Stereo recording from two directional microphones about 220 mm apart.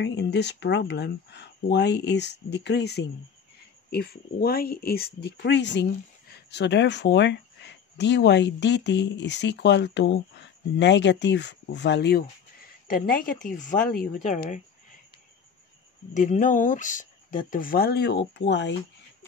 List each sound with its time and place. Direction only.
0.0 s speech: 50° left (ahead or behind)
12.8 s speech: 40° left (ahead or behind)
16.1 s speech: 35° left (ahead or behind); by 18.8 s 55° left (ahead or behind)